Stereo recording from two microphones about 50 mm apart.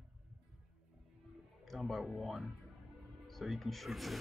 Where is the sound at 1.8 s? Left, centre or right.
Centre.